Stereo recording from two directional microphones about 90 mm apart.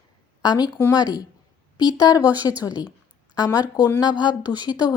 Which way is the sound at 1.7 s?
50° left (ahead or behind).